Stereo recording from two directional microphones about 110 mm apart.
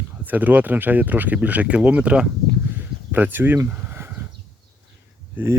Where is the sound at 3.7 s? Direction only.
20° right (ahead or behind).